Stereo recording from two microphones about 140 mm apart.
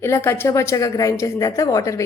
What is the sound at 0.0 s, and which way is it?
A woman's voice, 20° left (ahead or behind).